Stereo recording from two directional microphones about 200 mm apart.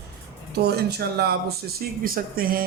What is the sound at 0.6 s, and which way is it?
Speech, 55° right (ahead or behind).